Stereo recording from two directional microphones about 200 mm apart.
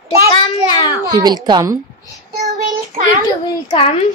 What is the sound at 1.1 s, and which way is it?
Speech, 20° right (ahead or behind).